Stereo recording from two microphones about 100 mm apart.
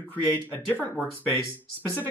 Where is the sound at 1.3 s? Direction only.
30° left (ahead or behind).